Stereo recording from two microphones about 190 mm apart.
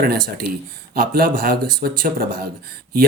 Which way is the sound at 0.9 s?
50° right (ahead or behind).